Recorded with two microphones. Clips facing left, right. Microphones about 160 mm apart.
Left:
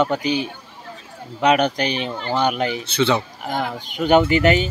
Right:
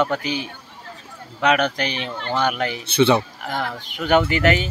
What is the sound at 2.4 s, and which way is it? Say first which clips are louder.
Speech: left 3 dB; 30° left (ahead or behind).